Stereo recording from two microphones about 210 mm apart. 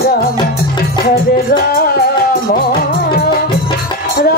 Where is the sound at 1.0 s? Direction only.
45° left (ahead or behind).